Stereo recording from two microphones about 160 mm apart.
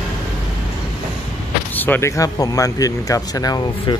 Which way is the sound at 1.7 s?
10° left (ahead or behind).